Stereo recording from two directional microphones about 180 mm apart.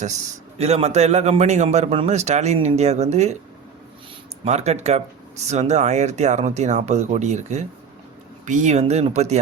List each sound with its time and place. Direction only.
0.6 s a man's voice: 35° right (ahead or behind)
4.4 s a man's voice: 40° right (ahead or behind)